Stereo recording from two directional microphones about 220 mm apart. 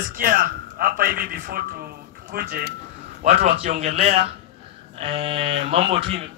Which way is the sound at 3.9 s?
30° right (ahead or behind).